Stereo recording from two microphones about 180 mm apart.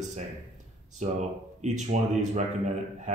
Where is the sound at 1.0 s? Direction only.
40° right (ahead or behind).